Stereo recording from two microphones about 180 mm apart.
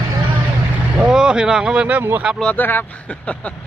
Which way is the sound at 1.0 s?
5° right (ahead or behind).